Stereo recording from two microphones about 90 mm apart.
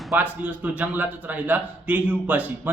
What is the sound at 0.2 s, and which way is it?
A man's voice, 20° right (ahead or behind).